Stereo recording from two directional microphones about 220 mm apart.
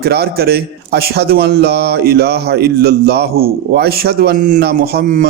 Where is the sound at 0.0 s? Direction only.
45° right (ahead or behind).